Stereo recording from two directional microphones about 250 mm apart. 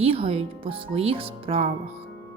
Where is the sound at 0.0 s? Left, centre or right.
Right.